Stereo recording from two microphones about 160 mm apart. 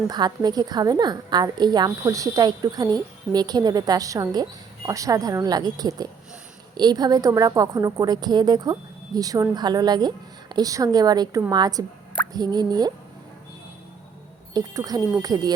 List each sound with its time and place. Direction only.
0.1 s a woman's voice: 25° right (ahead or behind)
14.5 s a woman's voice: 20° right (ahead or behind)